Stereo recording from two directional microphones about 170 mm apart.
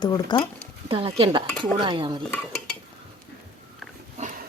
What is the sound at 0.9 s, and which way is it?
Dishes, 35° right (ahead or behind).